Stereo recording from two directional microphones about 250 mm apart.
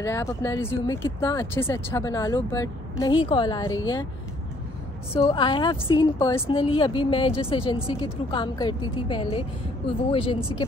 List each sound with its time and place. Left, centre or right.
0.0 s speech: centre
5.2 s a woman's voice: centre